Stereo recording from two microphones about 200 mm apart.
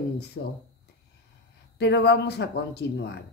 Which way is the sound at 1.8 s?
55° left (ahead or behind).